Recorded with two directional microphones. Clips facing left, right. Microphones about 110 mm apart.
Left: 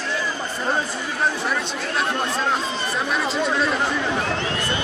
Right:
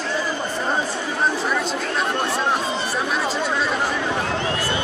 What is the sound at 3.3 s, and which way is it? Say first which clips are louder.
Chatter: left 1 dB; centre (ahead or behind).